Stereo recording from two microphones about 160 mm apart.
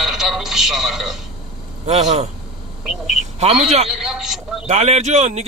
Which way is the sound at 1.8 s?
40° right (ahead or behind).